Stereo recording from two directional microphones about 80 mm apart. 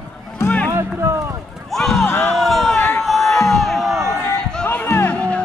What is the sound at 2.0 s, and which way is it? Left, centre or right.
Run, left.